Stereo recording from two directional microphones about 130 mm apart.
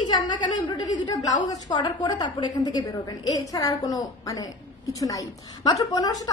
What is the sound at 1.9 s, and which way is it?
A woman's voice, 35° left (ahead or behind).